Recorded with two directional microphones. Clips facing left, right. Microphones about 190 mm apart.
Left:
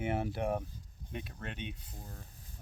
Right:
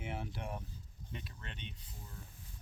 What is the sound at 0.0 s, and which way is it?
Speech, 60° left (ahead or behind).